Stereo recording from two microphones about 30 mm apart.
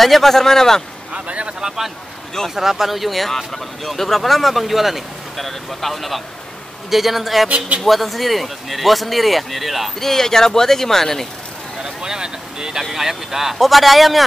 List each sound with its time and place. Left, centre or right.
0.0 s speech: centre
1.1 s speech: right
2.5 s speech: centre
5.4 s speech: centre
7.4 s a man's voice: right
7.8 s speech: centre
9.9 s speech: centre
11.8 s speech: right
12.9 s speech: centre